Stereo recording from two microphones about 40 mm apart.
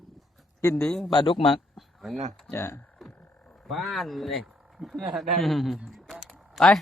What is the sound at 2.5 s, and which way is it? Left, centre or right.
Speech, left.